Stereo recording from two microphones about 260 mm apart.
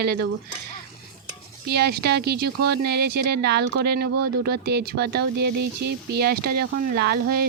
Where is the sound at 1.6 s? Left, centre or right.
Right.